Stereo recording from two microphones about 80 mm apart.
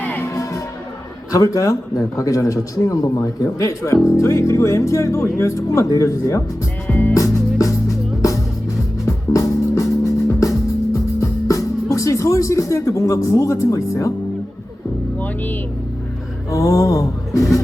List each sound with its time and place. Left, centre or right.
1.3 s a man's voice: left
7.1 s music: left
15.2 s speech: left
16.5 s speech: left